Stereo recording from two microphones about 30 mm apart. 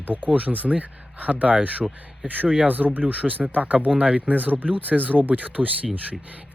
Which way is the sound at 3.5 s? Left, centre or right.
Right.